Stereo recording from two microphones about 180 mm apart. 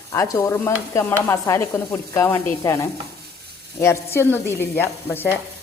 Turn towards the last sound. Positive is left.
turn(degrees=10)  # may be behind; listen again after turning